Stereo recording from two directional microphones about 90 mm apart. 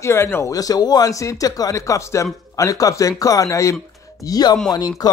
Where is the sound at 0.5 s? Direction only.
45° left (ahead or behind).